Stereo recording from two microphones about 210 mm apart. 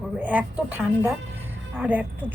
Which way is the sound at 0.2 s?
10° right (ahead or behind).